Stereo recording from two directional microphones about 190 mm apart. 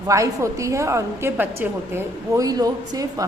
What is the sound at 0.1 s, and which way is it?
A woman's voice, 15° right (ahead or behind).